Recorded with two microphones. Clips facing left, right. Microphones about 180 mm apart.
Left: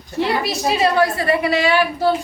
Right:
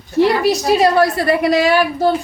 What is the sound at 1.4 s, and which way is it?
Speech, 40° right (ahead or behind).